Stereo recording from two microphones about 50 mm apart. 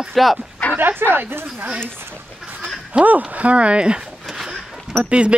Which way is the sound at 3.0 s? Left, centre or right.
Right.